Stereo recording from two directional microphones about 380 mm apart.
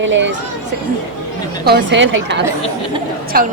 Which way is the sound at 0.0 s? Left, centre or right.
Right.